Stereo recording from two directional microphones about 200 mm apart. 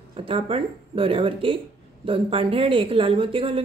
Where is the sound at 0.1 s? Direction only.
25° right (ahead or behind).